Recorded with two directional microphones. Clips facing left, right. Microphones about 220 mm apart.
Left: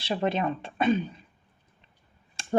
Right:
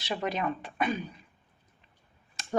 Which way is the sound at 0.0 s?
30° left (ahead or behind).